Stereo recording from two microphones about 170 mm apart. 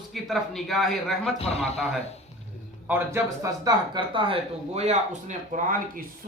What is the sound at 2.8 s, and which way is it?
Speech, 15° right (ahead or behind).